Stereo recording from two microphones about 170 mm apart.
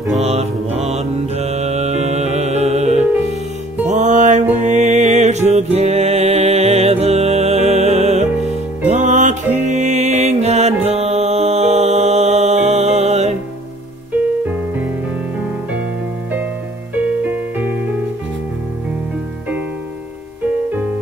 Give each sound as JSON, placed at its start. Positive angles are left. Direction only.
{"t": 0.2, "sound": "music", "side_deg": -40}
{"t": 16.9, "sound": "music", "side_deg": -10}